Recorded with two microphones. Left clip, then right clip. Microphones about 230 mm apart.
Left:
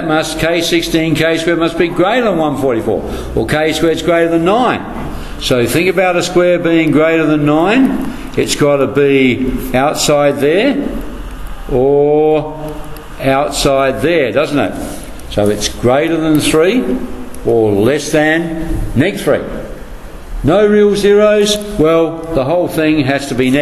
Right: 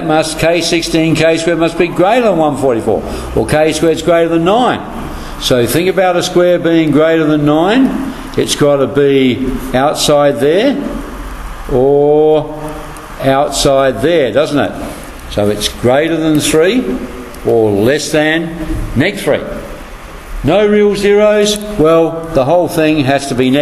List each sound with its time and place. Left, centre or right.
0.1 s a man's voice: centre
20.4 s a man's voice: centre